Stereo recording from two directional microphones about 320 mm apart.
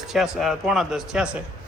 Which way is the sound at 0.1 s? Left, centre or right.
Centre.